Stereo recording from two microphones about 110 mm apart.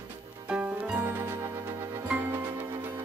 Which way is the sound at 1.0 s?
25° right (ahead or behind).